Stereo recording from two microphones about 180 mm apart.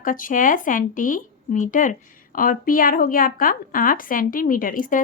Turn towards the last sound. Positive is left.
turn(degrees=50)  # may be behind; listen again after turning